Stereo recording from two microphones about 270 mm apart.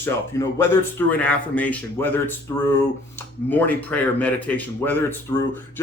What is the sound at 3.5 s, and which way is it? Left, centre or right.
A man's voice, centre.